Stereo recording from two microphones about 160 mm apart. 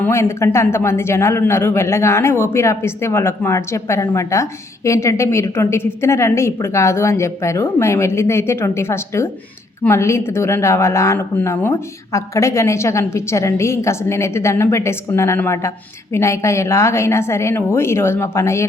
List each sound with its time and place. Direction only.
0.0 s a man's voice: 15° left (ahead or behind)